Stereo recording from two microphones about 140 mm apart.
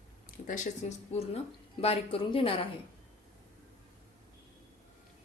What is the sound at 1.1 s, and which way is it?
A woman's voice, 50° left (ahead or behind).